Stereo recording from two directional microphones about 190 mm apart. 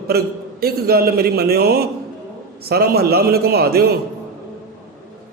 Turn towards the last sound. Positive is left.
turn(degrees=-55)  # may be behind; listen again after turning